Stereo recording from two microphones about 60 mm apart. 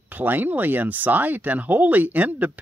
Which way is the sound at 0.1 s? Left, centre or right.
Right.